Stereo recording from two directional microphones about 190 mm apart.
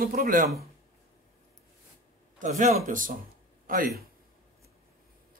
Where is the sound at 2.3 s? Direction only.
45° right (ahead or behind).